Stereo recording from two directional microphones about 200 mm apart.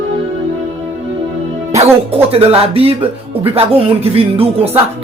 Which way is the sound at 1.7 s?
30° right (ahead or behind).